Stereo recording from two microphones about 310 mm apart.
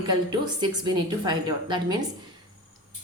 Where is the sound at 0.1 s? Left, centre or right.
Centre.